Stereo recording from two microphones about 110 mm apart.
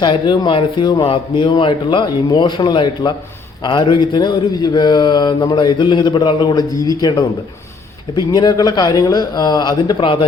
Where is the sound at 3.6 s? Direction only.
45° left (ahead or behind).